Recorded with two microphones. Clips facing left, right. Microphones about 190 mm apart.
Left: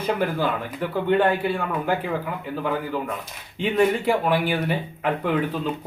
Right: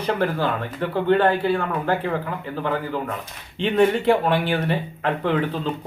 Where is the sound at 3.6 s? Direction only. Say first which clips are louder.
Right 2 dB; 10° left (ahead or behind).